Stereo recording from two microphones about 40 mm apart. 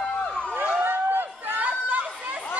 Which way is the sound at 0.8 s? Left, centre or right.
Right.